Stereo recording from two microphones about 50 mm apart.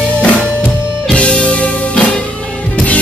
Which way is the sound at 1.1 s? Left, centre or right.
Left.